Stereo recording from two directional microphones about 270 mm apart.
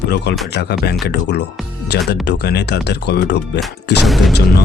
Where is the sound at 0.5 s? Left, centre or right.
Left.